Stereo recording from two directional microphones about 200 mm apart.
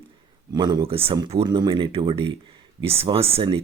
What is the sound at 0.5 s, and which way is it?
Speech, 20° right (ahead or behind).